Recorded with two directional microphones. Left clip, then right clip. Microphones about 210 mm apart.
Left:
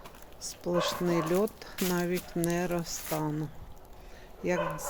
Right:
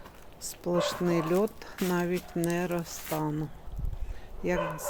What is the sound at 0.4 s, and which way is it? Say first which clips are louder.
Speech: right 1 dB; 15° right (ahead or behind).